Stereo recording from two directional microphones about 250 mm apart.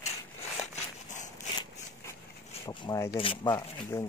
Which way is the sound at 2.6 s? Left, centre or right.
Centre.